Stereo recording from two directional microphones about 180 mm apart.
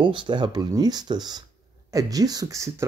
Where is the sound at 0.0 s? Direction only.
25° right (ahead or behind).